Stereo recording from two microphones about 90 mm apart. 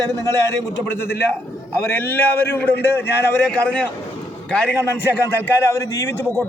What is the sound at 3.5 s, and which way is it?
Speech, 15° left (ahead or behind).